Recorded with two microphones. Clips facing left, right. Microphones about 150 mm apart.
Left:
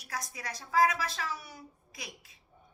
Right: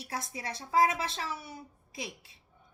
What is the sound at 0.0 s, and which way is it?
A woman's voice, 25° right (ahead or behind).